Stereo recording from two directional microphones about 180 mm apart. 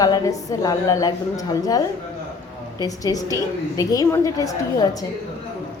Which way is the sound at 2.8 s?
20° left (ahead or behind).